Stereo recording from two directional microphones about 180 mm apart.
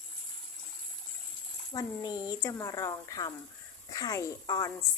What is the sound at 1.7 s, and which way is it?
Speech, 20° left (ahead or behind).